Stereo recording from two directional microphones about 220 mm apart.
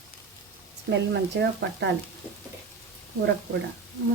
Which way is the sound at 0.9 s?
50° right (ahead or behind).